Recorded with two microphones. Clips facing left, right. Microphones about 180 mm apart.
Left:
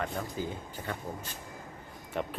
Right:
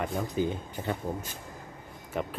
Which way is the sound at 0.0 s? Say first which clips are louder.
Right 5 dB; 20° right (ahead or behind).